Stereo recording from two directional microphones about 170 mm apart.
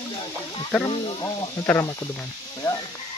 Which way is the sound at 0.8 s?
20° left (ahead or behind).